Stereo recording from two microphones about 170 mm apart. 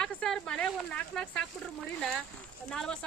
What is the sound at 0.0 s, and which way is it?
Speech, 5° left (ahead or behind).